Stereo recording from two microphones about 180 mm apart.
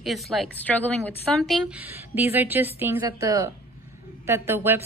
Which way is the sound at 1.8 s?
10° right (ahead or behind).